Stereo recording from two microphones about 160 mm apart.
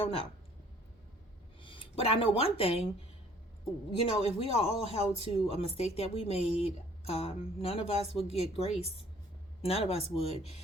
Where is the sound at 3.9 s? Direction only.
35° left (ahead or behind).